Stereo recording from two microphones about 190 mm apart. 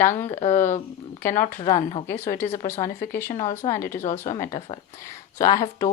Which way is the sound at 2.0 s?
15° left (ahead or behind).